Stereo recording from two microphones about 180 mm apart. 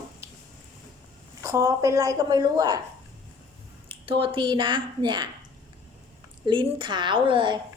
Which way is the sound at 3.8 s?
30° right (ahead or behind).